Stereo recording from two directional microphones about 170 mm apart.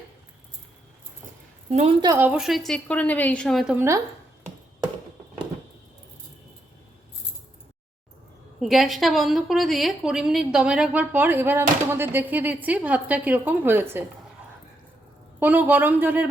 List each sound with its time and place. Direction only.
1.7 s a woman's voice: 35° right (ahead or behind)
2.1 s a woman's voice: 10° right (ahead or behind)
3.8 s speech: 15° right (ahead or behind)
8.6 s a woman's voice: centre (ahead or behind)
15.4 s speech: 10° right (ahead or behind)